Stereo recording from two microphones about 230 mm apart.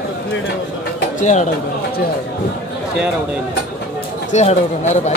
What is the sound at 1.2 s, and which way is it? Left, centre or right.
Speech, left.